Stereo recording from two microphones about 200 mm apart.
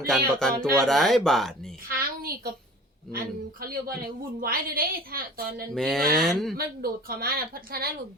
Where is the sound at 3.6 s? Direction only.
45° right (ahead or behind).